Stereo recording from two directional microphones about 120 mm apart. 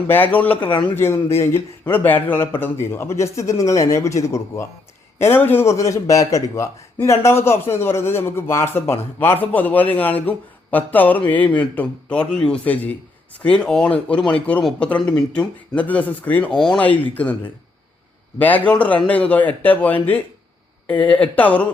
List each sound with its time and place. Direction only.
0.1 s speech: 15° left (ahead or behind)